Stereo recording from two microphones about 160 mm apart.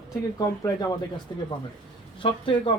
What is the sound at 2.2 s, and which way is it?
Speech, 35° left (ahead or behind).